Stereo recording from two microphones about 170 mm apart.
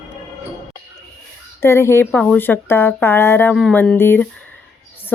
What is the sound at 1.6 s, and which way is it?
A woman's voice, 15° left (ahead or behind).